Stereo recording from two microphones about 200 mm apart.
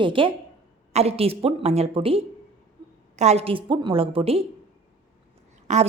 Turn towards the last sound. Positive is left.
turn(degrees=-35)  # may be behind; listen again after turning